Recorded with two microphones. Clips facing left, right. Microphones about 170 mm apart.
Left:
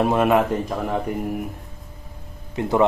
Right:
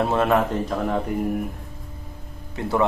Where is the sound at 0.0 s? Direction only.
15° left (ahead or behind).